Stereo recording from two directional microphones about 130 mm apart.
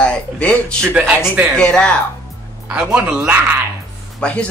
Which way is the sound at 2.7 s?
10° right (ahead or behind).